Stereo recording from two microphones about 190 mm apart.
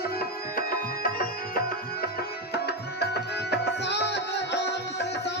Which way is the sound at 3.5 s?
65° left (ahead or behind).